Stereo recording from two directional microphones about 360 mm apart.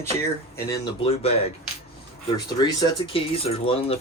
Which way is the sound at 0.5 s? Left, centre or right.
Centre.